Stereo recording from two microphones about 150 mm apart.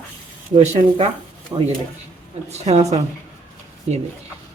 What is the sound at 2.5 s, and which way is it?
Speech, 45° right (ahead or behind).